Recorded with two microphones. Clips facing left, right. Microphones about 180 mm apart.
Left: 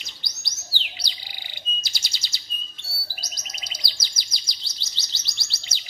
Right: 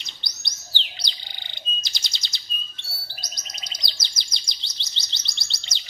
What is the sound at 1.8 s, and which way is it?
Chirp, 10° left (ahead or behind).